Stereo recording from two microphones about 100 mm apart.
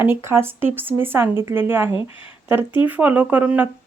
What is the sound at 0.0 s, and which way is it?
Speech, 25° right (ahead or behind).